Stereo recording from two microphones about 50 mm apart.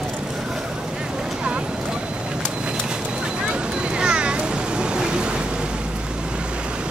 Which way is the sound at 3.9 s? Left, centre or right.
Centre.